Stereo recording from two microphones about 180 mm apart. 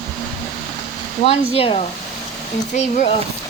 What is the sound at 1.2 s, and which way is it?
Speech, 30° left (ahead or behind).